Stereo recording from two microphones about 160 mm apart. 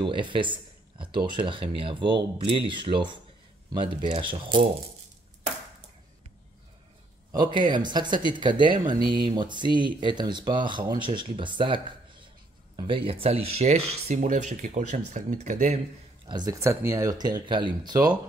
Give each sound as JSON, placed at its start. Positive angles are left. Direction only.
{"t": 0.0, "sound": "speech", "side_deg": -30}
{"t": 4.2, "sound": "speech", "side_deg": -30}
{"t": 7.3, "sound": "speech", "side_deg": -30}
{"t": 16.3, "sound": "speech", "side_deg": -25}